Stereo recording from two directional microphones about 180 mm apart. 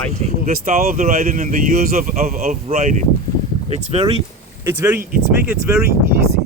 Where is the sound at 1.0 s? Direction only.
40° right (ahead or behind).